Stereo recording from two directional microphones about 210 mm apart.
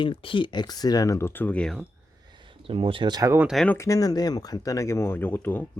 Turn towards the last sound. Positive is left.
turn(degrees=10)  # may be behind; listen again after turning